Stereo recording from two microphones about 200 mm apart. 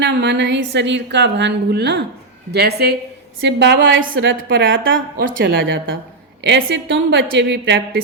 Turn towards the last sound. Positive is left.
turn(degrees=-55)  # may be behind; listen again after turning